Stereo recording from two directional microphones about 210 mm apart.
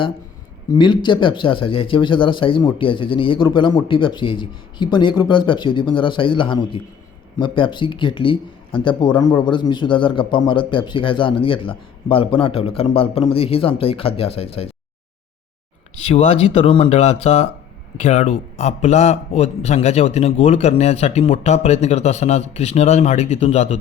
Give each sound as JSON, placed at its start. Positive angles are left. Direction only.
{"t": 0.7, "sound": "speech", "side_deg": 20}
{"t": 16.0, "sound": "a man's voice", "side_deg": 30}